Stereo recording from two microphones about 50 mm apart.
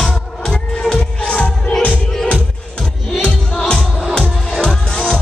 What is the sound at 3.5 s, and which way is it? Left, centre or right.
Music, centre.